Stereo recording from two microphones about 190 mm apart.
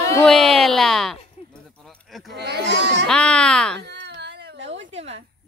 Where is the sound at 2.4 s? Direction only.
60° right (ahead or behind).